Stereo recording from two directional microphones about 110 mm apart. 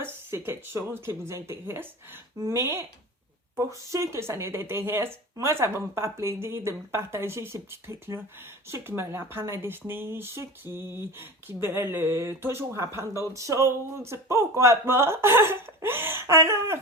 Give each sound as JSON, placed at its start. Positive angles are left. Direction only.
{"t": 0.0, "sound": "speech", "side_deg": -20}